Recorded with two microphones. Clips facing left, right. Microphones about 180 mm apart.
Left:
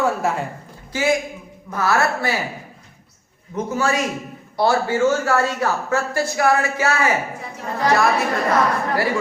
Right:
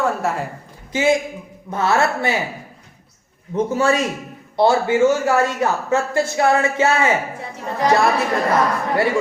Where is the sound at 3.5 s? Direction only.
30° right (ahead or behind).